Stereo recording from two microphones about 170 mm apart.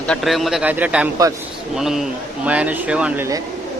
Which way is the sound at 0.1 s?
Centre (ahead or behind).